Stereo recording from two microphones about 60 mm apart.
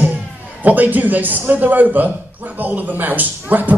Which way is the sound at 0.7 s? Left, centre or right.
Right.